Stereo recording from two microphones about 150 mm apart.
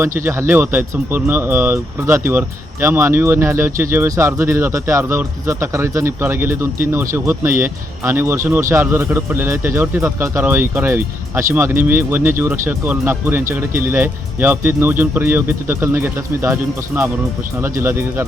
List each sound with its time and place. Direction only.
0.0 s speech: 15° right (ahead or behind)